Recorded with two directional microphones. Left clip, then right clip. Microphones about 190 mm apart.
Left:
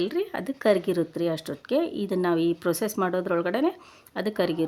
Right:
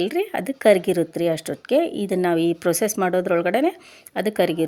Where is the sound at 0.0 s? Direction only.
15° right (ahead or behind).